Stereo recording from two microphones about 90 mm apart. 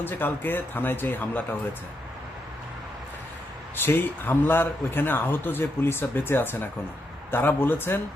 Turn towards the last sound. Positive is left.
turn(degrees=25)  # may be behind; listen again after turning